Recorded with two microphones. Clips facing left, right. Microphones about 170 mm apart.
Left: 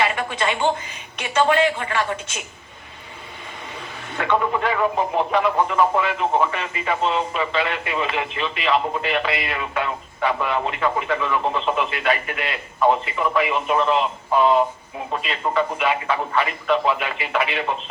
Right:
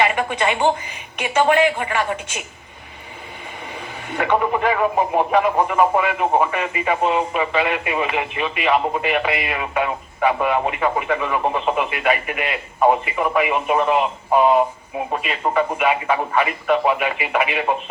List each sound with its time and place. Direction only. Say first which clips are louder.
0.4 s speech: right 2 dB; 10° right (ahead or behind)
4.2 s speech: right 2 dB; 10° right (ahead or behind)